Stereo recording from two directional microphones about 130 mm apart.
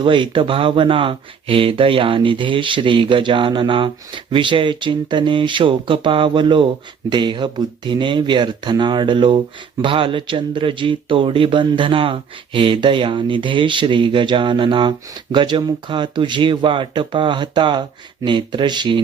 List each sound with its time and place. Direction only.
0.0 s speech: 40° right (ahead or behind)